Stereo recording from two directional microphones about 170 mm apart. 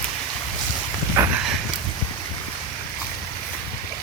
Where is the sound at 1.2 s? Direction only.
15° right (ahead or behind).